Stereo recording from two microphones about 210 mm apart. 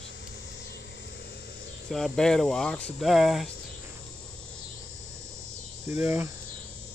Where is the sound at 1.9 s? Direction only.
Centre (ahead or behind).